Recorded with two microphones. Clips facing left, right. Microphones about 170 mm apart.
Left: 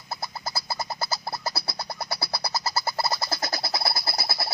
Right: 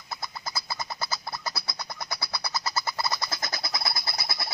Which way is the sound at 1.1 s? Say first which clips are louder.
Left 3 dB; 30° left (ahead or behind).